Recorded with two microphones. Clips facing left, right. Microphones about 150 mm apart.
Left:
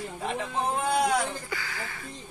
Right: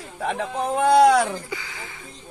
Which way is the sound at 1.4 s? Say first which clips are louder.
Right 1 dB; 20° right (ahead or behind).